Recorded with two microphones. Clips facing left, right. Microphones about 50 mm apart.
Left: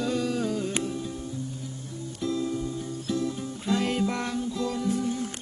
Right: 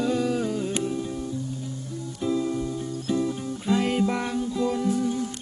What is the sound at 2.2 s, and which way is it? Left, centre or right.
Music, right.